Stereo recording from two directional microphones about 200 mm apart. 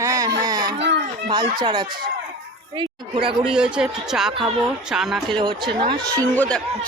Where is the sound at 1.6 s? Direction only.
20° right (ahead or behind).